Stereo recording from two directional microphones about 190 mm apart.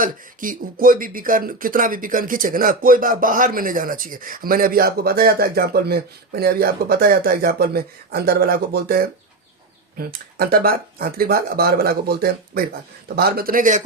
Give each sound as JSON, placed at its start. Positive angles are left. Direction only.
{"t": 0.0, "sound": "speech", "side_deg": -45}